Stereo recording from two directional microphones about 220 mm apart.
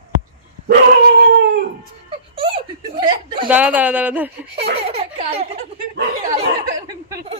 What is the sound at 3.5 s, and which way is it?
Speech, 5° right (ahead or behind).